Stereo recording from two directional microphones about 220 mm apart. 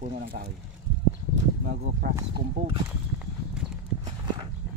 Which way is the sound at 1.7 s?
45° right (ahead or behind).